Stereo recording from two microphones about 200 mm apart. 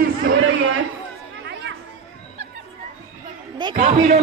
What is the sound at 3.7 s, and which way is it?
Speech, 35° right (ahead or behind).